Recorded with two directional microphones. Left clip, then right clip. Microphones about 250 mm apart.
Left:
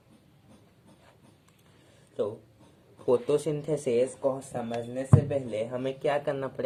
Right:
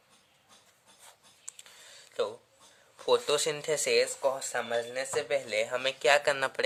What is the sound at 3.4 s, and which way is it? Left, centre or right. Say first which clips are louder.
Speech: even; right.